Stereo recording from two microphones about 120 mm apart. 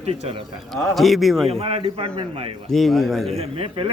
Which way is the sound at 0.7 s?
Centre (ahead or behind).